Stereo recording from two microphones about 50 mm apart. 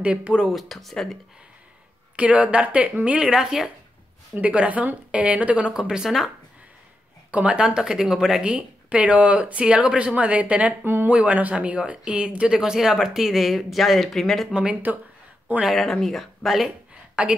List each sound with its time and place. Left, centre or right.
0.0 s speech: right
0.5 s speech: centre
2.1 s speech: right
3.3 s speech: centre
4.4 s speech: right
5.7 s speech: centre
7.2 s speech: right
7.6 s speech: centre
8.5 s speech: right
12.5 s speech: centre
14.5 s speech: centre
15.6 s speech: centre
17.1 s a woman's voice: right